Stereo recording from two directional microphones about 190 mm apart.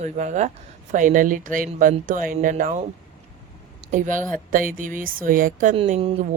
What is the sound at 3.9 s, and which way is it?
Speech, 40° right (ahead or behind).